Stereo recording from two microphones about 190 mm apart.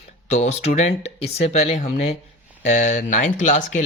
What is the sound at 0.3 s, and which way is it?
Speech, 35° left (ahead or behind).